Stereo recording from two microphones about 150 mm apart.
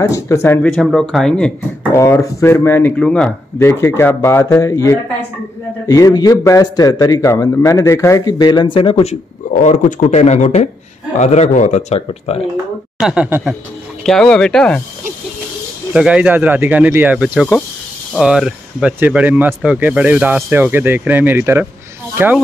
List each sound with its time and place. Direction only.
0.0 s a man's voice: 15° left (ahead or behind)
0.7 s speech: centre (ahead or behind)
2.0 s a man's voice: 20° left (ahead or behind)
3.5 s a man's voice: 15° left (ahead or behind); by 12.4 s 45° left (ahead or behind)
12.9 s a woman's voice: 5° right (ahead or behind)
14.0 s speech: 5° left (ahead or behind)
15.9 s speech: 5° right (ahead or behind)